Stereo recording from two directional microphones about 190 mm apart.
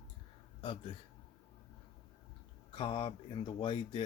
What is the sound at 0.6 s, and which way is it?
Speech, 25° left (ahead or behind).